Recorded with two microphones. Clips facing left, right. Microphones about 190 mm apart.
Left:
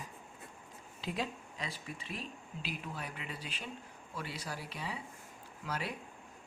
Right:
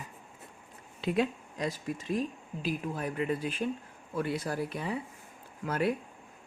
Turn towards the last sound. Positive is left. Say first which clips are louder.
# right 10 dB
turn(degrees=-55)  # may be behind; listen again after turning